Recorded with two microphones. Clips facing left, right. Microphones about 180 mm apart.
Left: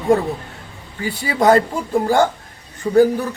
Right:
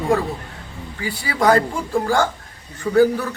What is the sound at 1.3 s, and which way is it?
Speech, 20° left (ahead or behind).